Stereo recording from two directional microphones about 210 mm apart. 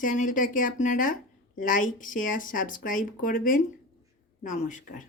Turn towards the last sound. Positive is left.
turn(degrees=35)  # may be behind; listen again after turning